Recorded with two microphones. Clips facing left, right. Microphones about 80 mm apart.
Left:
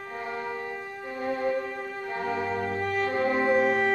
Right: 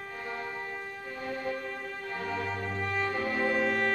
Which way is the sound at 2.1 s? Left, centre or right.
Left.